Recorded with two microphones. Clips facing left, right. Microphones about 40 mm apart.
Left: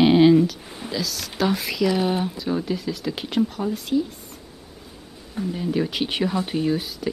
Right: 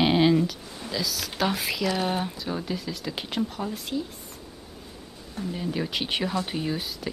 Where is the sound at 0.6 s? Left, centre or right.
Centre.